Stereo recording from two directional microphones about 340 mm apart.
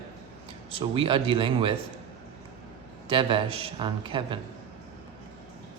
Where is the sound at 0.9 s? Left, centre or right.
Centre.